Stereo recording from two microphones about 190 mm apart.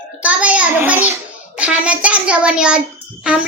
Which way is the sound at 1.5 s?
5° right (ahead or behind).